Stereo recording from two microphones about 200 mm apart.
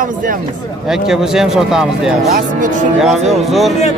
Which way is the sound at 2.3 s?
40° right (ahead or behind).